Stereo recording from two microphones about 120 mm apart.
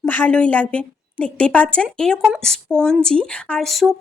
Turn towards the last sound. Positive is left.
turn(degrees=0)  # may be behind; listen again after turning